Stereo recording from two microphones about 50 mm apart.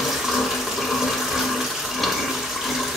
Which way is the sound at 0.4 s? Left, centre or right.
Centre.